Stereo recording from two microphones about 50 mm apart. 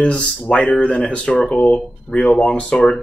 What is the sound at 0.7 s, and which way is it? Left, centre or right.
Speech, centre.